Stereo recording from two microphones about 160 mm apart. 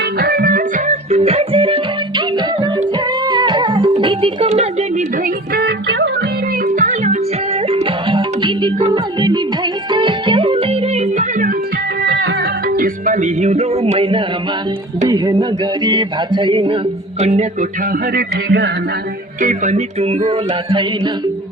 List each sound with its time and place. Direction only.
0.0 s music: 75° right (ahead or behind)
1.1 s music: 40° right (ahead or behind)
4.4 s a woman's voice: 45° right (ahead or behind)
5.5 s music: 90° right
6.7 s music: 50° right (ahead or behind)
12.0 s music: 90° right; by 14.3 s 35° right (ahead or behind)
15.0 s a sound: 25° right (ahead or behind)
17.2 s speech: 45° right (ahead or behind)
18.1 s speech: 80° right
19.4 s speech: 50° right (ahead or behind); by 21.1 s 30° right (ahead or behind)